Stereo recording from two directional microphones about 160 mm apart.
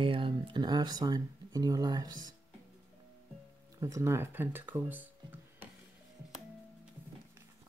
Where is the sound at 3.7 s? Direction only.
20° right (ahead or behind).